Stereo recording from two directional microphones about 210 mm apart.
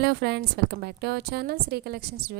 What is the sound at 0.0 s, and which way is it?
A woman's voice, 50° right (ahead or behind).